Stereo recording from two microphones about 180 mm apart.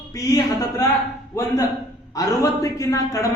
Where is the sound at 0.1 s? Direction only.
20° left (ahead or behind).